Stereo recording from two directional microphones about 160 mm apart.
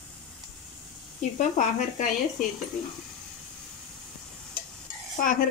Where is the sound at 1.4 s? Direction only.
50° left (ahead or behind).